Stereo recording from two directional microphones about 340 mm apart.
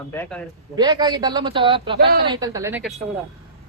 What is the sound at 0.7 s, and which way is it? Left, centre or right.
A man's voice, centre.